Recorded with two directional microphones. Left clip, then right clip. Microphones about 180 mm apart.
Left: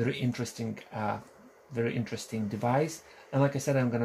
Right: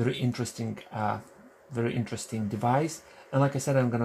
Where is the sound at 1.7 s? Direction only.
15° right (ahead or behind).